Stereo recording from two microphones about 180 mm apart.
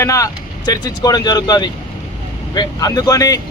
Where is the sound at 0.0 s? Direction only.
20° left (ahead or behind).